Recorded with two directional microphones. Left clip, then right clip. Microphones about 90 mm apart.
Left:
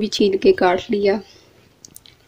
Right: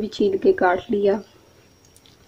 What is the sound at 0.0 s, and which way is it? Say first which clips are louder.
Speech: left 3 dB; 25° left (ahead or behind).